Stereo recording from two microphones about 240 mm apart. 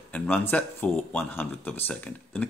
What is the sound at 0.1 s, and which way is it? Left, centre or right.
Speech, centre.